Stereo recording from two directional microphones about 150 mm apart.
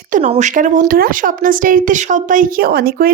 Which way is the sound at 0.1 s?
50° right (ahead or behind).